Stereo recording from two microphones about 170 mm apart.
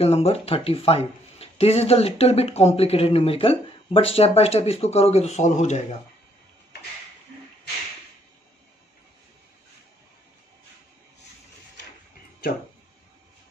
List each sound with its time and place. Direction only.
0.0 s speech: 35° left (ahead or behind)